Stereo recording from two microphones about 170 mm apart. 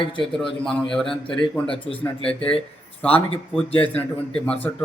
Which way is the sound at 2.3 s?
5° left (ahead or behind).